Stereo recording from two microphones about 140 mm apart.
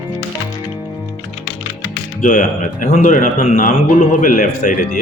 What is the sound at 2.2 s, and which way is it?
A man's voice, 65° left (ahead or behind).